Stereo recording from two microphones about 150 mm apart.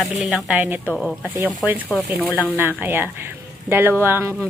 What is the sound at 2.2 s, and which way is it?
A woman's voice, 10° right (ahead or behind).